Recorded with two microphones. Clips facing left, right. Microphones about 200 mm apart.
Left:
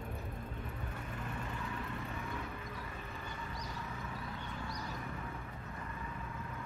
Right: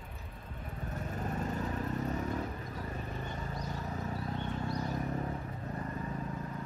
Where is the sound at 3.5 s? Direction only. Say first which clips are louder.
Right 5 dB; 40° right (ahead or behind).